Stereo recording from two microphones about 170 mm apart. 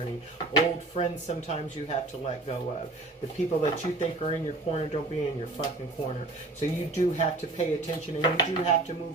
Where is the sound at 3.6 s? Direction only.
40° left (ahead or behind).